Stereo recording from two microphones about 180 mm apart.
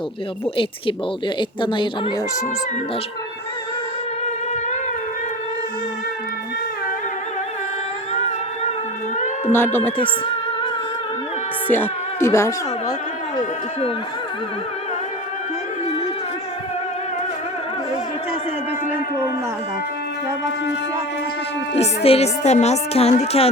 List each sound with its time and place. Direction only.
0.5 s speech: 30° left (ahead or behind)
9.5 s speech: 10° left (ahead or behind)
11.7 s speech: 15° left (ahead or behind)
21.8 s speech: 35° left (ahead or behind)